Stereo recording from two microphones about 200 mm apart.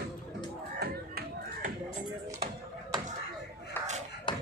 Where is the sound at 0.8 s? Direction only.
50° right (ahead or behind).